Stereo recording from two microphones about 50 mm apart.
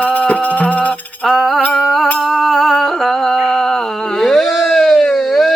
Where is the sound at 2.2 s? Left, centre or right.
Centre.